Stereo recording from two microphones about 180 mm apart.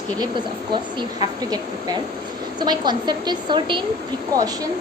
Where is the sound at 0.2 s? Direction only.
25° right (ahead or behind).